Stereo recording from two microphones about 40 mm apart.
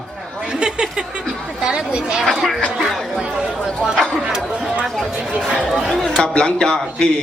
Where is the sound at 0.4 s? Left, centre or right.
Centre.